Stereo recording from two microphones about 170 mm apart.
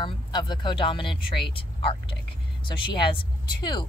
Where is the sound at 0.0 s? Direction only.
25° left (ahead or behind).